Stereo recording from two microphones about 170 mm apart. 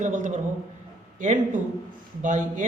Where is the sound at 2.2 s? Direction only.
50° right (ahead or behind).